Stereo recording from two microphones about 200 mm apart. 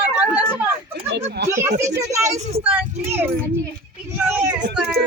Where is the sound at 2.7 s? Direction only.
10° right (ahead or behind).